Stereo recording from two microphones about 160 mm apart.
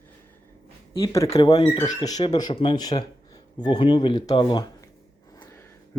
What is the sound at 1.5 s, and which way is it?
Speech, 35° left (ahead or behind).